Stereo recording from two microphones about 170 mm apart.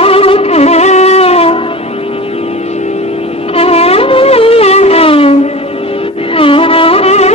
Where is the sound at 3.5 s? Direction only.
35° left (ahead or behind).